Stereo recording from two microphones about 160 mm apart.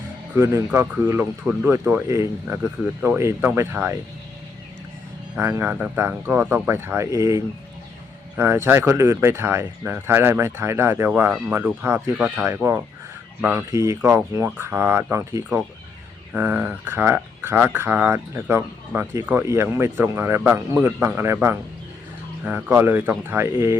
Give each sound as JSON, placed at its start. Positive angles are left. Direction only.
{"t": 0.3, "sound": "speech", "side_deg": -15}
{"t": 5.4, "sound": "speech", "side_deg": -15}
{"t": 8.4, "sound": "speech", "side_deg": -15}
{"t": 22.4, "sound": "speech", "side_deg": -10}